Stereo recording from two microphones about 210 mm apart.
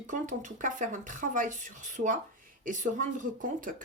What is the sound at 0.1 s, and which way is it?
Speech, 40° right (ahead or behind).